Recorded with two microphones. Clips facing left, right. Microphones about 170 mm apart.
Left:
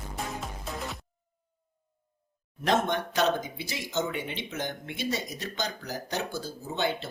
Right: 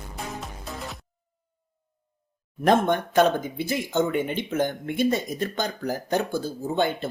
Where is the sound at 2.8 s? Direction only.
50° right (ahead or behind).